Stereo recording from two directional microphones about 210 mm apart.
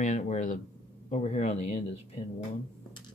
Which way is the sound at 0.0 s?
35° left (ahead or behind).